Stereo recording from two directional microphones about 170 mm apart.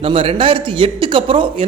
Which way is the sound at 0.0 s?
35° right (ahead or behind).